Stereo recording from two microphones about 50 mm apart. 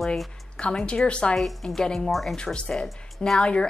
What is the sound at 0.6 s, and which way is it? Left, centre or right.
Speech, centre.